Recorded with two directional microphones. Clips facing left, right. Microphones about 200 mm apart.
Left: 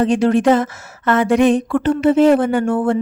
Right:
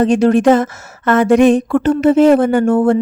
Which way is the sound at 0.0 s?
45° right (ahead or behind).